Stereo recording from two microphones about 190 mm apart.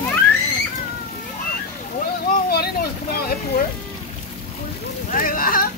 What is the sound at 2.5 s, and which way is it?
Speech, 55° left (ahead or behind).